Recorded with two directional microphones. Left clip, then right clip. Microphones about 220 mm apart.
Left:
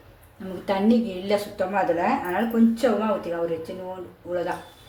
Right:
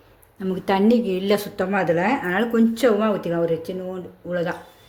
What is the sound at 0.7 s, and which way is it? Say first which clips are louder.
A woman's voice: right 4 dB; 40° right (ahead or behind).